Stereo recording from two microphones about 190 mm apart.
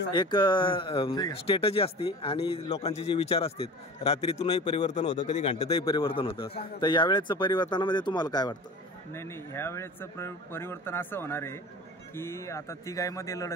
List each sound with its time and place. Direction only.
0.1 s speech: 25° left (ahead or behind)